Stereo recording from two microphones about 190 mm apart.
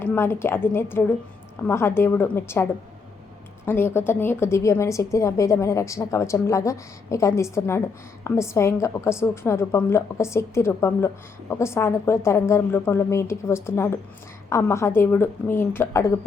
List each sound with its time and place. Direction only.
0.0 s a woman's voice: 10° left (ahead or behind)
3.7 s a woman's voice: 10° left (ahead or behind)